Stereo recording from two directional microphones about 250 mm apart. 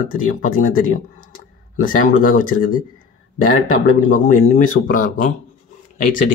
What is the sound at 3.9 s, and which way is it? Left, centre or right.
Speech, left.